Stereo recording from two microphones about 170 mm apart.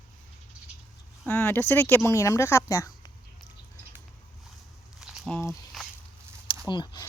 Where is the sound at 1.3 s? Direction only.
10° left (ahead or behind).